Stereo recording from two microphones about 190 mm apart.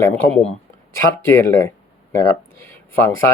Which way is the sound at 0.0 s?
10° left (ahead or behind).